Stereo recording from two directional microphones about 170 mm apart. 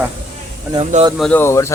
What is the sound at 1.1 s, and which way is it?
Speech, 5° left (ahead or behind).